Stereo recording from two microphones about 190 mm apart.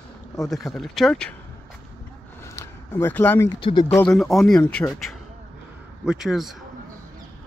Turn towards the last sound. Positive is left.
turn(degrees=0)  # may be behind; listen again after turning